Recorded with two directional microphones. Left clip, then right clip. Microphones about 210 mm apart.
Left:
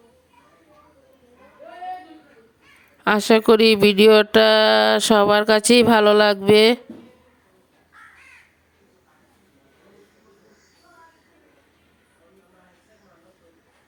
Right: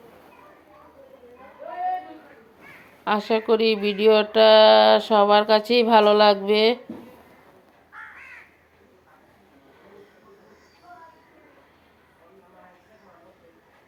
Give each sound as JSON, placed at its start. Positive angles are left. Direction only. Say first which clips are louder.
{"t": 3.0, "sound": "speech", "louder": "left 6 dB", "side_deg": 50}